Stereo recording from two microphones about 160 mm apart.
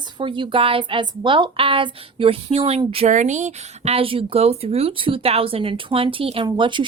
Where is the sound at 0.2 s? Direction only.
30° right (ahead or behind).